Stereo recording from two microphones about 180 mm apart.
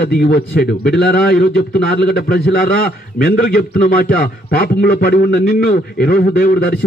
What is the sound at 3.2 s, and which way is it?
A man's voice, 55° left (ahead or behind).